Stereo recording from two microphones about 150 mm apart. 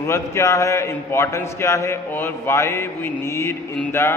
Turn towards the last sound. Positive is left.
turn(degrees=15)  # may be behind; listen again after turning